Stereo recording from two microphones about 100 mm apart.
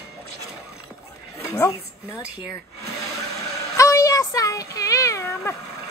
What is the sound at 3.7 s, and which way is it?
Child singing, 35° left (ahead or behind).